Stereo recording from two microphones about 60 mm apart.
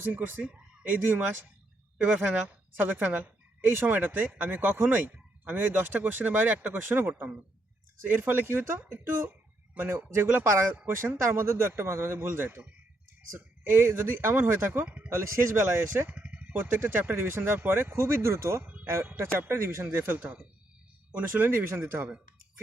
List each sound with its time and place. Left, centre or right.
0.0 s a woman's voice: right
2.0 s a woman's voice: right
13.7 s speech: right
15.1 s speech: right
16.1 s a sound: right
16.5 s speech: right
18.6 s a sound: right
19.1 s speech: right
19.9 s a woman's voice: right